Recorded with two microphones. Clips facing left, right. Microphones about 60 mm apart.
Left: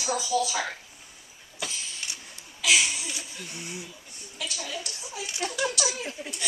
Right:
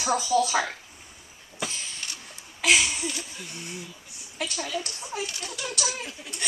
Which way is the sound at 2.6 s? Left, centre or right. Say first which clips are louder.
Right 2 dB; right.